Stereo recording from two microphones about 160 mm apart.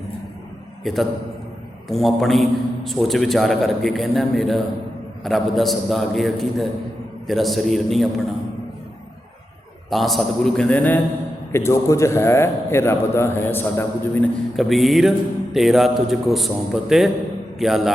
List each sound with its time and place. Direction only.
0.9 s a man's voice: centre (ahead or behind)
9.9 s a man's voice: centre (ahead or behind)
14.5 s a man's voice: centre (ahead or behind)